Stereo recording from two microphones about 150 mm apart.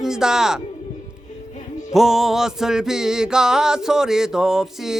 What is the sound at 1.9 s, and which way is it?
Music, centre (ahead or behind).